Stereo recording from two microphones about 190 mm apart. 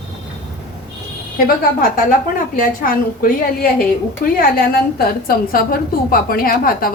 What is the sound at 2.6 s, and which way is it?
A woman's voice, 50° left (ahead or behind).